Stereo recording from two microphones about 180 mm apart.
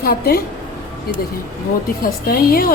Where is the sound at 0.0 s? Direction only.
60° left (ahead or behind).